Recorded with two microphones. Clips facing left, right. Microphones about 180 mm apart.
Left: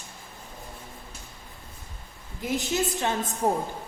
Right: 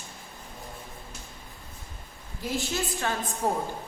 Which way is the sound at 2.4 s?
20° left (ahead or behind).